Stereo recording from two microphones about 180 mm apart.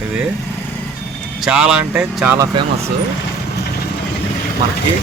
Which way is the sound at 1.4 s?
5° right (ahead or behind).